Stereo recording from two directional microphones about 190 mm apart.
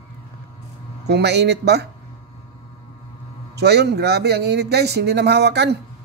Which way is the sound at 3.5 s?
60° right (ahead or behind).